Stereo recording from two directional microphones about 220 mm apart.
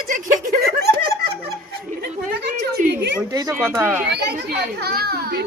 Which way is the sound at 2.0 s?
45° right (ahead or behind).